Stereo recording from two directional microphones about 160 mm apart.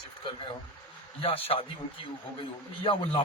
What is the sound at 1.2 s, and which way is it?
Speech, 35° left (ahead or behind).